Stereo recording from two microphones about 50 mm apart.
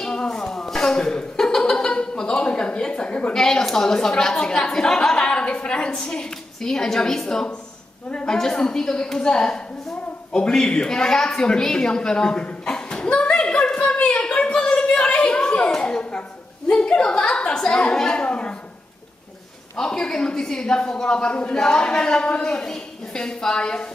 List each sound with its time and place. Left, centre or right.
0.0 s chuckle: centre
3.3 s a woman's voice: centre
11.3 s chuckle: centre
13.8 s a sound: left
17.6 s a woman's voice: centre
19.8 s a woman's voice: centre